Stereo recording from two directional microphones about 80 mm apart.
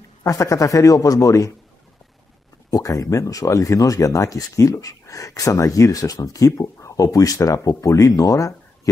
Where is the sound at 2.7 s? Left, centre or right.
Left.